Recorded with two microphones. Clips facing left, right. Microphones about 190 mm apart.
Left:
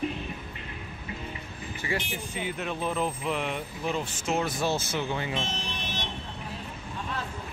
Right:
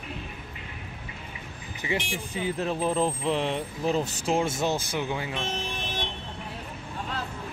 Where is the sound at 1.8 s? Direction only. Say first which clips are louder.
Right 2 dB; 15° right (ahead or behind).